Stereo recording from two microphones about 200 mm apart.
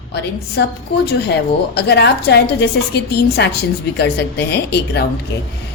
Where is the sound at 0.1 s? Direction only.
55° left (ahead or behind).